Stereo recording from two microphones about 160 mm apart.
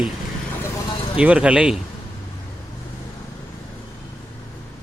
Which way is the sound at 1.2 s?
10° right (ahead or behind).